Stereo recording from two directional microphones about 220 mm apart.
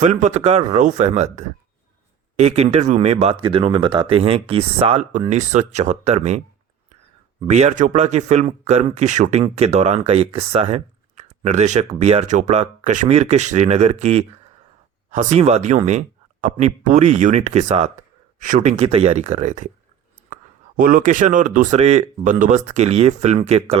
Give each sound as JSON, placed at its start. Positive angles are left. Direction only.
{"t": 0.0, "sound": "speech", "side_deg": -35}
{"t": 7.4, "sound": "speech", "side_deg": -30}